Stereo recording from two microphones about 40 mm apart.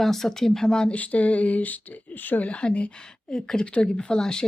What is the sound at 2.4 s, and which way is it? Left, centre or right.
Speech, left.